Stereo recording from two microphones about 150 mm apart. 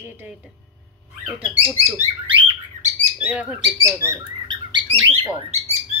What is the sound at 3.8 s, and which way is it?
Speech, 20° right (ahead or behind).